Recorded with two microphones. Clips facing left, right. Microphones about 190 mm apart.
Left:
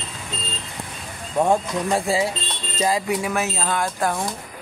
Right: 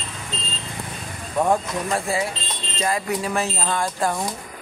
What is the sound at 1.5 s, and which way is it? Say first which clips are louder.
Speech: left 1 dB; 25° left (ahead or behind).